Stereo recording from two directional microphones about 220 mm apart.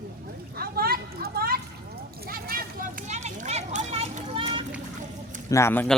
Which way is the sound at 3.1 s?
30° right (ahead or behind).